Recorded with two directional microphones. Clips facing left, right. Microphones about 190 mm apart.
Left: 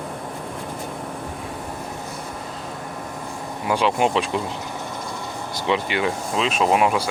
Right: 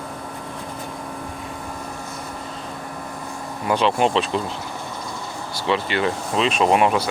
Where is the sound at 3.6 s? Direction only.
10° left (ahead or behind).